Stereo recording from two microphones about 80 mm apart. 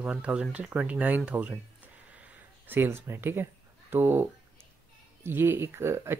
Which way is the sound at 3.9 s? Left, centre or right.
Right.